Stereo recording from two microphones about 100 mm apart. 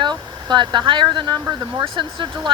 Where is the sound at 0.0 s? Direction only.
50° right (ahead or behind).